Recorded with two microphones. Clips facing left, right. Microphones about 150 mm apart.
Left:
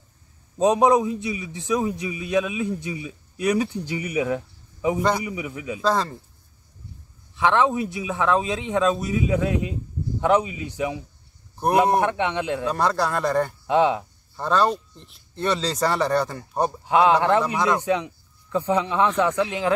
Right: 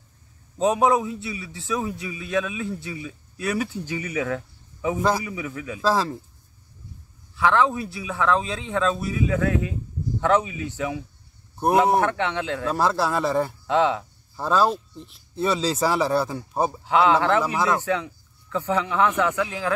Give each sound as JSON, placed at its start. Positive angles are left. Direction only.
{"t": 0.6, "sound": "a man's voice", "side_deg": 20}
{"t": 5.8, "sound": "speech", "side_deg": -5}
{"t": 7.3, "sound": "a man's voice", "side_deg": 20}
{"t": 12.6, "sound": "speech", "side_deg": -5}
{"t": 13.7, "sound": "speech", "side_deg": 15}
{"t": 14.3, "sound": "speech", "side_deg": -5}
{"t": 16.8, "sound": "a man's voice", "side_deg": 15}